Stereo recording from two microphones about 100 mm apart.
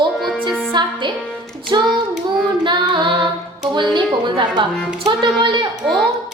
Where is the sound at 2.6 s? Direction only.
50° right (ahead or behind).